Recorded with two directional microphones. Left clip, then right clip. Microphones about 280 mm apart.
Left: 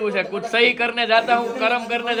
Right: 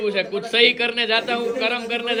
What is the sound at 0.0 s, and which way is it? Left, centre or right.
Speech, centre.